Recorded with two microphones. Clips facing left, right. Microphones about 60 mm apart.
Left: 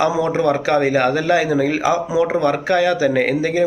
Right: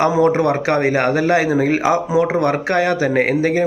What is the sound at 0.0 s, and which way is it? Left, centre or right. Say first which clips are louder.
A man's voice: right 2 dB; right.